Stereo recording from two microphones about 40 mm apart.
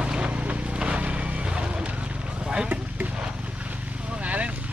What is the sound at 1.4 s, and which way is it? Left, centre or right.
Vehicle, right.